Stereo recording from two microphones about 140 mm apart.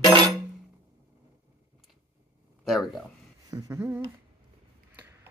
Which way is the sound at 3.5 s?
25° right (ahead or behind).